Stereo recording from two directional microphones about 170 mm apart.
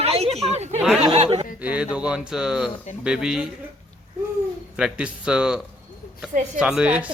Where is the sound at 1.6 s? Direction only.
10° right (ahead or behind).